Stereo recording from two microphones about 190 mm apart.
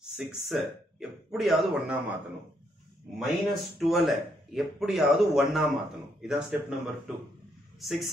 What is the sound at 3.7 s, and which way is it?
Speech, centre (ahead or behind).